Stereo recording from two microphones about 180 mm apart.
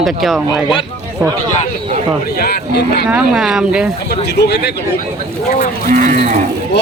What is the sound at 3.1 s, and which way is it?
Speech, 5° right (ahead or behind).